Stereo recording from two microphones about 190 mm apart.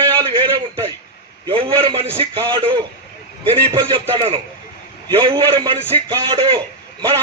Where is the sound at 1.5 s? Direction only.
30° right (ahead or behind).